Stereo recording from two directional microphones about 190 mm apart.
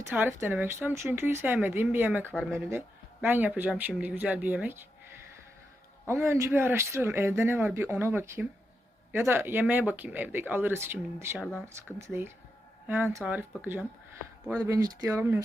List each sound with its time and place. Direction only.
0.1 s speech: 10° right (ahead or behind)
6.1 s speech: 15° right (ahead or behind)
14.6 s speech: 20° right (ahead or behind)